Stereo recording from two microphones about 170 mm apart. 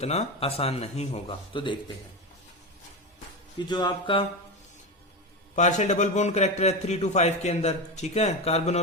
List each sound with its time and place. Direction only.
0.0 s a man's voice: 40° left (ahead or behind)
3.7 s a sound: 25° left (ahead or behind)
5.5 s a man's voice: 45° left (ahead or behind)